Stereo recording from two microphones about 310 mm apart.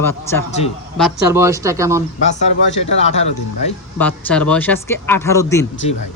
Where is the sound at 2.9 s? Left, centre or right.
Left.